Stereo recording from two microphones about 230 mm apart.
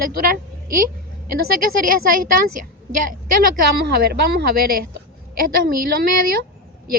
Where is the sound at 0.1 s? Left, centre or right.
Right.